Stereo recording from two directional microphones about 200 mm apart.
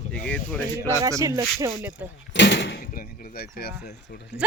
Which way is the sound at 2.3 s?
60° left (ahead or behind).